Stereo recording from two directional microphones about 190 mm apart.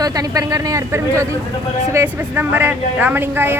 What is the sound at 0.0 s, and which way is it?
A woman's voice, 20° right (ahead or behind).